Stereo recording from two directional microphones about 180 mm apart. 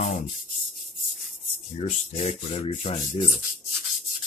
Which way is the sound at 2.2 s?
35° left (ahead or behind).